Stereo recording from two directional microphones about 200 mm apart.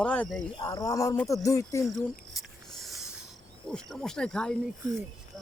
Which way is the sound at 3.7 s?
Centre (ahead or behind).